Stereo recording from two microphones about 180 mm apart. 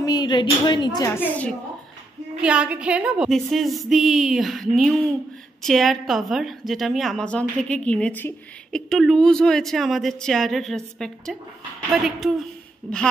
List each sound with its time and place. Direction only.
0.0 s speech: 20° left (ahead or behind)
2.4 s a woman's voice: 5° right (ahead or behind)